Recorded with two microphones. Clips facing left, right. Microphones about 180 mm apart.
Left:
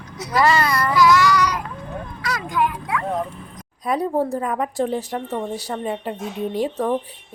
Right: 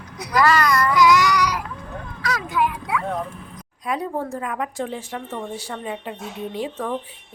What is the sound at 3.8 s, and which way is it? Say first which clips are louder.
A woman's voice: left 5 dB; 35° left (ahead or behind).